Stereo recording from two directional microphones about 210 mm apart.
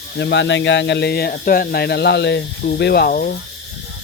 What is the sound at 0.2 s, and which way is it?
Speech, 55° left (ahead or behind).